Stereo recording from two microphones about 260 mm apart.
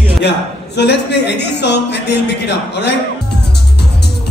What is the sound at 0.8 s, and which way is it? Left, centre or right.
Speech, left.